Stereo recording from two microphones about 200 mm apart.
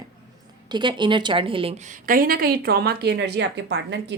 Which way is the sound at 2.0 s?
45° right (ahead or behind).